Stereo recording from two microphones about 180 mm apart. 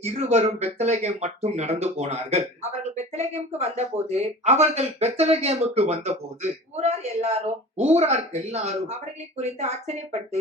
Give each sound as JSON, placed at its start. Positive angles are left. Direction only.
{"t": 0.0, "sound": "speech", "side_deg": -35}